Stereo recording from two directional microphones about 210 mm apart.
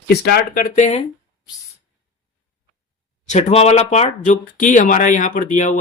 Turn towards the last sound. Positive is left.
turn(degrees=35)  # may be behind; listen again after turning